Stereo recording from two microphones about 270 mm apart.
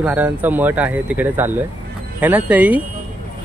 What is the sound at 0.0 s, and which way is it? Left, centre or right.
Speech, centre.